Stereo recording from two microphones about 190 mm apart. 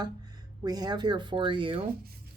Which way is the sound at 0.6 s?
20° right (ahead or behind).